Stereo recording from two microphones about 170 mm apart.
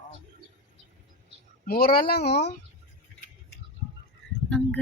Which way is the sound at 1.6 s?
65° left (ahead or behind).